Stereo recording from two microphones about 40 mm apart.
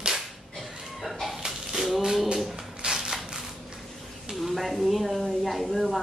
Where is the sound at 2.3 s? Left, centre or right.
Centre.